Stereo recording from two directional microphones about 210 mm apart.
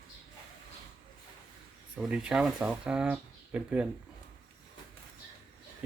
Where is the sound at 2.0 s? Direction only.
5° right (ahead or behind).